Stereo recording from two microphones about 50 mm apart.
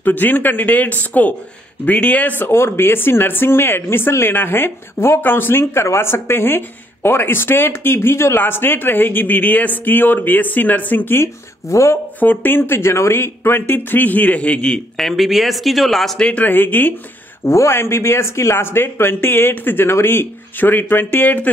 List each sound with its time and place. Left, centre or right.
0.0 s speech: left
2.4 s speech: left
11.7 s speech: left
12.2 s speech: left
15.0 s speech: centre
16.2 s speech: left
16.4 s speech: left
17.5 s speech: left